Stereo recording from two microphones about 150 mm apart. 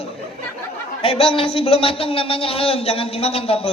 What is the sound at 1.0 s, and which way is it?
A man's voice, 40° left (ahead or behind).